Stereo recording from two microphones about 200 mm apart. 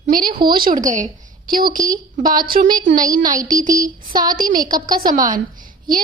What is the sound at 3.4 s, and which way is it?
A woman's voice, 40° right (ahead or behind).